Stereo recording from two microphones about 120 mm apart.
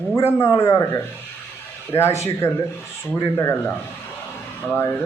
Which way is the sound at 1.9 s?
20° left (ahead or behind).